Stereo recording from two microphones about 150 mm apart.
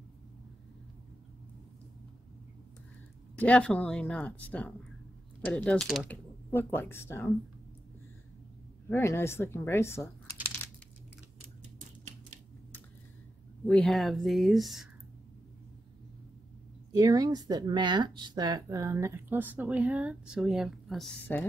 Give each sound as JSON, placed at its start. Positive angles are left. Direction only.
{"t": 3.3, "sound": "speech", "side_deg": 10}
{"t": 6.0, "sound": "speech", "side_deg": 10}
{"t": 8.8, "sound": "speech", "side_deg": 15}
{"t": 10.6, "sound": "crumpling", "side_deg": 15}
{"t": 13.7, "sound": "speech", "side_deg": 5}
{"t": 16.9, "sound": "speech", "side_deg": -25}
{"t": 21.3, "sound": "speech", "side_deg": 10}